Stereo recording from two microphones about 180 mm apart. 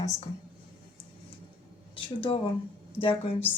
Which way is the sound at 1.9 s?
30° left (ahead or behind).